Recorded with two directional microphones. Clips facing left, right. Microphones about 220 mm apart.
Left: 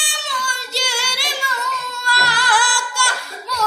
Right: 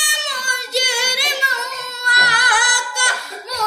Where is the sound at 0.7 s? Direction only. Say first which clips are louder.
Right 5 dB; 20° right (ahead or behind).